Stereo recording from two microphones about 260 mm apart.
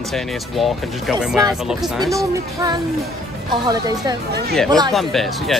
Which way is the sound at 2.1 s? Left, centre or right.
Centre.